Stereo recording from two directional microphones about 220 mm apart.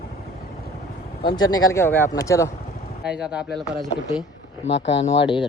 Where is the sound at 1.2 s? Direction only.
20° left (ahead or behind).